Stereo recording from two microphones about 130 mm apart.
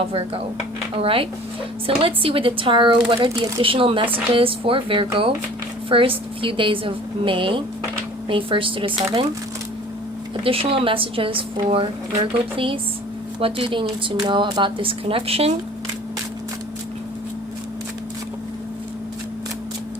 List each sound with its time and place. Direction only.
0.9 s speech: 45° right (ahead or behind)
3.2 s speech: 25° right (ahead or behind)
3.6 s a woman's voice: 45° right (ahead or behind)
10.4 s speech: 45° right (ahead or behind)